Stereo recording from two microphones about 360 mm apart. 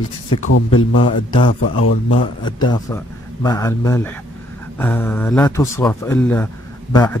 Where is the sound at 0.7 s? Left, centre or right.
Centre.